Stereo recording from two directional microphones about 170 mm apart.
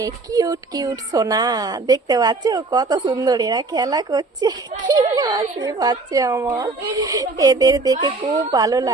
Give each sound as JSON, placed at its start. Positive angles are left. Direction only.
{"t": 0.0, "sound": "speech", "side_deg": -20}